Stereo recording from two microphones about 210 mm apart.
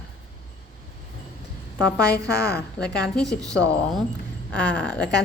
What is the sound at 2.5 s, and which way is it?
Speech, 50° left (ahead or behind).